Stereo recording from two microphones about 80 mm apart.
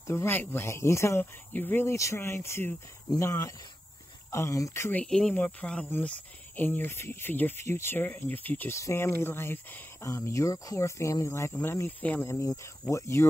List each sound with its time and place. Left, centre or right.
0.0 s speech: left
2.0 s speech: left
5.0 s speech: centre; by 8.7 s left
8.7 s speech: left
10.0 s speech: left